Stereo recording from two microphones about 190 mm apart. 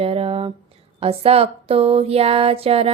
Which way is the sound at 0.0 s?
30° right (ahead or behind).